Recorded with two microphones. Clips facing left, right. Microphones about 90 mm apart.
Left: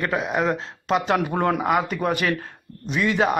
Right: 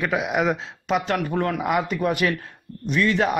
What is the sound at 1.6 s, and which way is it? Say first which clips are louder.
A man's voice: left 1 dB; centre (ahead or behind).